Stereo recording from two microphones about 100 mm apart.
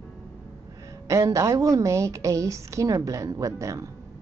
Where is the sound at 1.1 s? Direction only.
30° right (ahead or behind).